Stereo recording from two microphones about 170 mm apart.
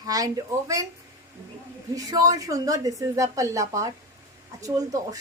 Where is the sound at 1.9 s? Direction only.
20° right (ahead or behind).